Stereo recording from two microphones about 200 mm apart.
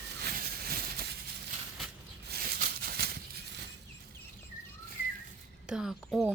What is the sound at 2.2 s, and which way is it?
Maraca, 50° right (ahead or behind).